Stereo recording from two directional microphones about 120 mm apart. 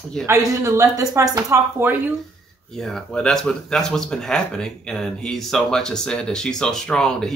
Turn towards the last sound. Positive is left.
turn(degrees=5)  # may be behind; listen again after turning